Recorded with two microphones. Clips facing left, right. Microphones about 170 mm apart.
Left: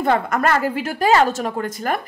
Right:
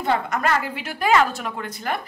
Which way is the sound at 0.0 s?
50° left (ahead or behind).